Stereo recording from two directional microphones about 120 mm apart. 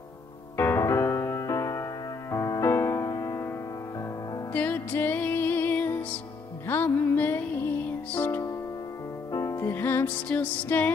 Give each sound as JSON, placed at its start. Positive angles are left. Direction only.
{"t": 0.6, "sound": "music", "side_deg": 20}
{"t": 4.5, "sound": "music", "side_deg": 15}
{"t": 9.3, "sound": "music", "side_deg": 25}